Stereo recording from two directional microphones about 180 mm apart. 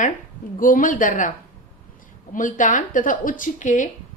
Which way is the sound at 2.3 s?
45° left (ahead or behind).